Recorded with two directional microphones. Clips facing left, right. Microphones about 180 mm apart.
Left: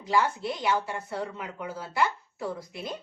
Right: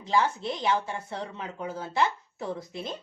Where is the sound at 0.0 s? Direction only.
25° right (ahead or behind).